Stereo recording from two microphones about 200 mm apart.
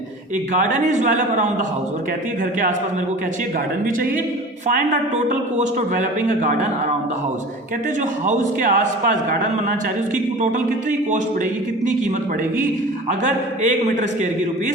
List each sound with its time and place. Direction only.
0.5 s a man's voice: 40° right (ahead or behind)
4.7 s a man's voice: 40° right (ahead or behind)
8.3 s a man's voice: 40° right (ahead or behind)
13.1 s a man's voice: 40° right (ahead or behind)